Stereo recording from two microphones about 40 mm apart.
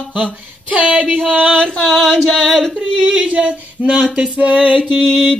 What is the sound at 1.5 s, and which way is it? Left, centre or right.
Female singing, centre.